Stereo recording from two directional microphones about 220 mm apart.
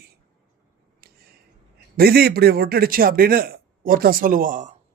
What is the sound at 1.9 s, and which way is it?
A man's voice, 45° right (ahead or behind).